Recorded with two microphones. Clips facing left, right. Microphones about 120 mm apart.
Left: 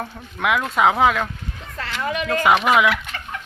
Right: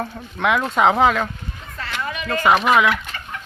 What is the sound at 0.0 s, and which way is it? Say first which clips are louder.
Speech: right 2 dB; 5° left (ahead or behind).